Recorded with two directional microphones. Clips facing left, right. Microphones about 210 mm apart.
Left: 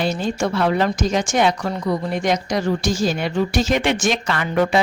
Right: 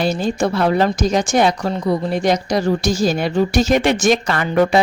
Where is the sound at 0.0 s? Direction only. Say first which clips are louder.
Right 3 dB; 35° right (ahead or behind).